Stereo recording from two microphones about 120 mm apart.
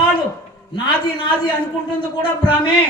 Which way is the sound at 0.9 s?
45° left (ahead or behind).